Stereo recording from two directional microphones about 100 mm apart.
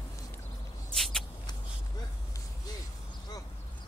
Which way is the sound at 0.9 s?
5° left (ahead or behind).